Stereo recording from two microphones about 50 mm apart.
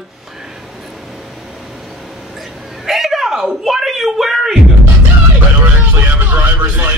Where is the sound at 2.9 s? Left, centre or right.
Centre.